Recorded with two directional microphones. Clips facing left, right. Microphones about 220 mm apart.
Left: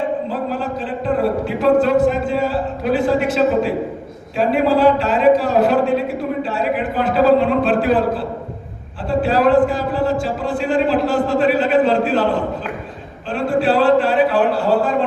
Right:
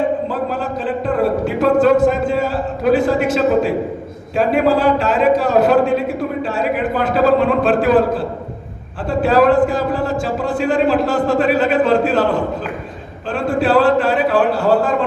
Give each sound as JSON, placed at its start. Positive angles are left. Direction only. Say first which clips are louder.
{"t": 0.6, "sound": "a man's voice", "louder": "right 2 dB", "side_deg": -45}
{"t": 13.3, "sound": "a man's voice", "louder": "right 1 dB", "side_deg": -45}